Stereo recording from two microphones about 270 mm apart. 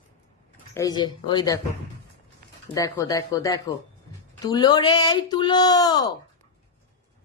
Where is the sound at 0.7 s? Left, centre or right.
Centre.